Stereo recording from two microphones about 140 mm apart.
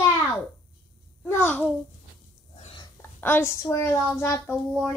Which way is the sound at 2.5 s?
45° left (ahead or behind).